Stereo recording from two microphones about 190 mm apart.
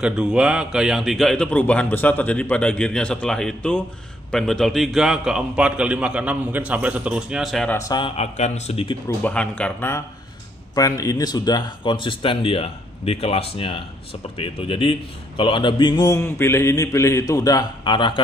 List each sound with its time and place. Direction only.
0.0 s a man's voice: 5° right (ahead or behind)
7.7 s a man's voice: 20° left (ahead or behind)
8.2 s speech: 35° left (ahead or behind)
9.2 s a man's voice: 5° left (ahead or behind); by 18.2 s 25° left (ahead or behind)